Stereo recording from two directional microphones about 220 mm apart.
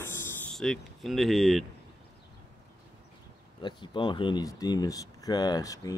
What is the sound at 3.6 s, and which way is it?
Speech, 20° left (ahead or behind).